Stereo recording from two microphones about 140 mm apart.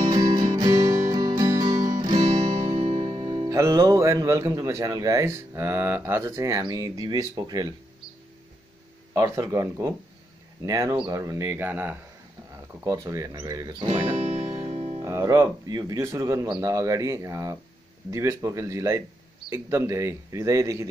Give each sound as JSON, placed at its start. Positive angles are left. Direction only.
{"t": 0.1, "sound": "music", "side_deg": -35}
{"t": 2.4, "sound": "music", "side_deg": -50}
{"t": 6.6, "sound": "speech", "side_deg": -30}
{"t": 9.1, "sound": "speech", "side_deg": -20}
{"t": 14.1, "sound": "music", "side_deg": -55}
{"t": 15.0, "sound": "speech", "side_deg": -20}